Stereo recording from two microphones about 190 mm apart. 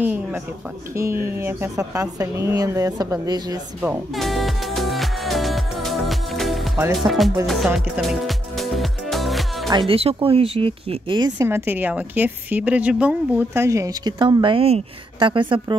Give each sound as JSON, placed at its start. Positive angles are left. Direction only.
{"t": 0.0, "sound": "speech", "side_deg": -10}
{"t": 3.8, "sound": "music", "side_deg": -5}
{"t": 6.8, "sound": "speech", "side_deg": -20}
{"t": 7.1, "sound": "music", "side_deg": 0}
{"t": 9.7, "sound": "speech", "side_deg": -25}